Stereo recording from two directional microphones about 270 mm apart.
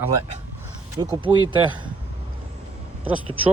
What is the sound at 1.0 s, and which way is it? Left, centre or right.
Speech, centre.